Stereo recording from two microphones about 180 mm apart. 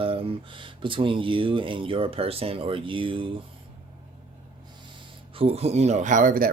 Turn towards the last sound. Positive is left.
turn(degrees=-50)  # may be behind; listen again after turning